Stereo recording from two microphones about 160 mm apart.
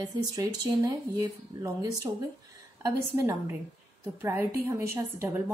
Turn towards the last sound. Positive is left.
turn(degrees=-15)  # may be behind; listen again after turning